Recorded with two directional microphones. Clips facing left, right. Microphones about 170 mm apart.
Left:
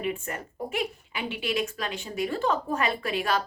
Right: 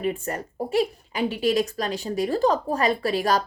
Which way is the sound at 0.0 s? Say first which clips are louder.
Right 4 dB; 40° right (ahead or behind).